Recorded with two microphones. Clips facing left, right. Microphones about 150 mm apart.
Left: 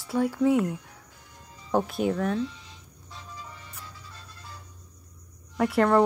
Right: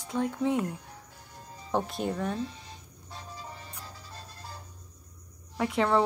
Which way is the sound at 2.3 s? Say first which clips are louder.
Left 5 dB; 45° right (ahead or behind).